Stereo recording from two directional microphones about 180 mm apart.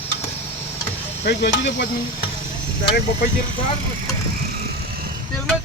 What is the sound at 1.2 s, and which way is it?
Speech, 70° left (ahead or behind).